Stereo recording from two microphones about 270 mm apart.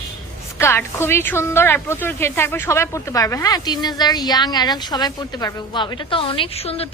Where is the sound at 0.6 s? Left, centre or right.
Centre.